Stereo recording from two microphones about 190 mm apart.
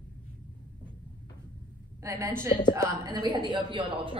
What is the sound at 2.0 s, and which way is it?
A man's voice, 15° right (ahead or behind).